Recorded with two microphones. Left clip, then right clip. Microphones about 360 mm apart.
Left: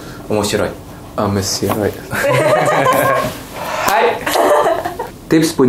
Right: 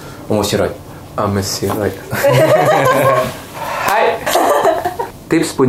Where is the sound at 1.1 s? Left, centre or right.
Centre.